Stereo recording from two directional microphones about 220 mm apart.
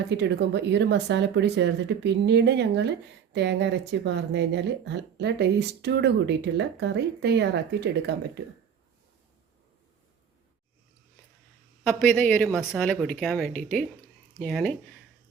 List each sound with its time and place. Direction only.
0.1 s speech: 50° right (ahead or behind)
11.8 s speech: 5° left (ahead or behind)